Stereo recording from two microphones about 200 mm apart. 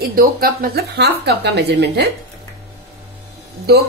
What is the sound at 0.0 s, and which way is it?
A woman's voice, 45° right (ahead or behind).